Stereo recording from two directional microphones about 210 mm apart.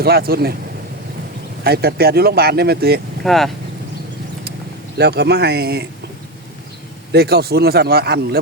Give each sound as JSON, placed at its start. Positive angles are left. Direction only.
{"t": 0.0, "sound": "speech", "side_deg": -45}
{"t": 1.6, "sound": "speech", "side_deg": -50}
{"t": 3.2, "sound": "speech", "side_deg": 0}
{"t": 4.9, "sound": "speech", "side_deg": -50}
{"t": 7.1, "sound": "speech", "side_deg": -50}